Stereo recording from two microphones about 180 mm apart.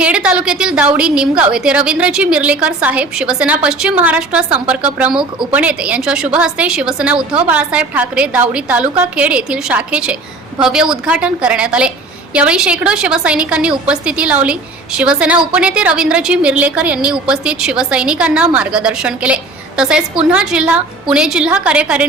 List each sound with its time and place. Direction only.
0.0 s a woman's voice: 5° right (ahead or behind)